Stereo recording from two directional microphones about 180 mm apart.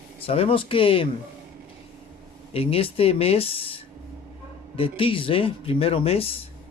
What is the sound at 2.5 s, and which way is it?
Speech, 30° left (ahead or behind).